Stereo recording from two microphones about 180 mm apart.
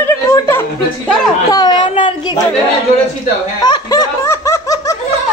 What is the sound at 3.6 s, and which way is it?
Laughter, 25° left (ahead or behind).